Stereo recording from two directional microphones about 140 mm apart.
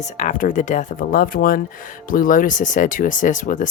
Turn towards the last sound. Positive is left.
turn(degrees=70)  # may be behind; listen again after turning